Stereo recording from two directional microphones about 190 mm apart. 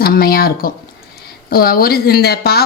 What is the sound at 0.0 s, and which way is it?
Speech, 55° left (ahead or behind).